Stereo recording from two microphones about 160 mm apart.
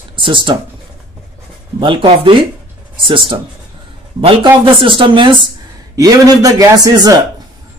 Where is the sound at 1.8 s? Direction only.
30° right (ahead or behind).